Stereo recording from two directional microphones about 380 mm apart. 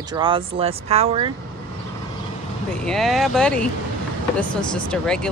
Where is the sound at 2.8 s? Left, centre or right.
Centre.